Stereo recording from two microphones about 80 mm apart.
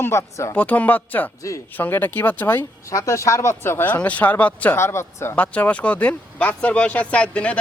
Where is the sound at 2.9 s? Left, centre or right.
Left.